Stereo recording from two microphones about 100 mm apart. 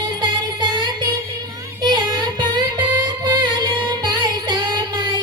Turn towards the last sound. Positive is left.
turn(degrees=-45)  # may be behind; listen again after turning